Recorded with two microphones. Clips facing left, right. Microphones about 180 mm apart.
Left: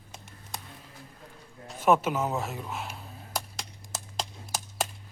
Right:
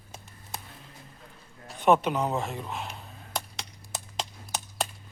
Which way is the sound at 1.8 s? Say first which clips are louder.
Right 1 dB; centre (ahead or behind).